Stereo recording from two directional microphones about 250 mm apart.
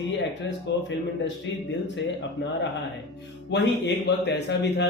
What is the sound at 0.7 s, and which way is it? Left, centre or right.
Speech, left.